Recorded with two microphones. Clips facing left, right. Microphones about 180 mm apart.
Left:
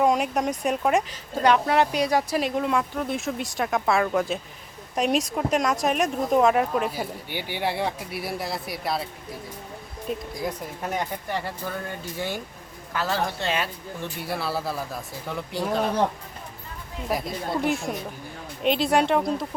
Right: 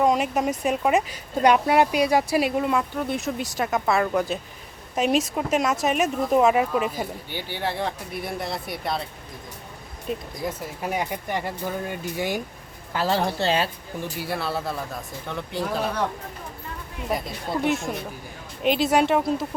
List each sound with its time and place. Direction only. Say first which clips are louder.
0.0 s speech: right 1 dB; centre (ahead or behind)
6.9 s speech: even; 10° left (ahead or behind)
10.1 s speech: even; centre (ahead or behind)
12.9 s a woman's voice: right 3 dB; 25° right (ahead or behind)
14.2 s speech: even; centre (ahead or behind)
17.1 s speech: even; centre (ahead or behind)